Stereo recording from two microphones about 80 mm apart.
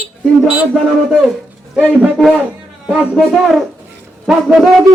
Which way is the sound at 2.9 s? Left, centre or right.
Centre.